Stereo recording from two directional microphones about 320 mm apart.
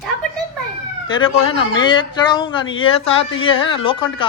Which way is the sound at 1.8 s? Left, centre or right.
Centre.